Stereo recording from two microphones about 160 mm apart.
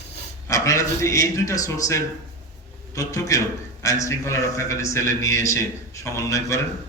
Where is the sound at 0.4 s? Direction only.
20° left (ahead or behind).